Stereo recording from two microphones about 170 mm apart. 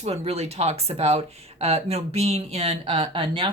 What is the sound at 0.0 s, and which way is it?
Speech, 40° right (ahead or behind).